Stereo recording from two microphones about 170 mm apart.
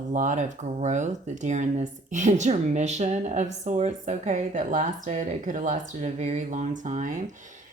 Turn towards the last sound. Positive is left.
turn(degrees=-45)  # may be behind; listen again after turning